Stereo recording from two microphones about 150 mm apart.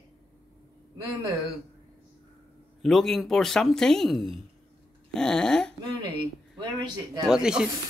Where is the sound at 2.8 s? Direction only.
Centre (ahead or behind).